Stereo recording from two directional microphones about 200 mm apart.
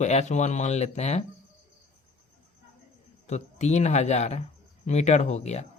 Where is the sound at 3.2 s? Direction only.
35° left (ahead or behind).